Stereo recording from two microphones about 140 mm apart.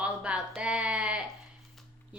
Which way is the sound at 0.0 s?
10° right (ahead or behind).